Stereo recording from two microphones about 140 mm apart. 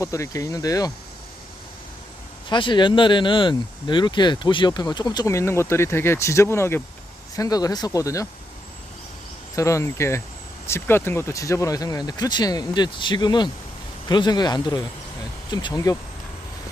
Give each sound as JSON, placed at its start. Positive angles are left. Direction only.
{"t": 0.0, "sound": "speech", "side_deg": 20}
{"t": 2.5, "sound": "speech", "side_deg": 35}
{"t": 9.6, "sound": "speech", "side_deg": 20}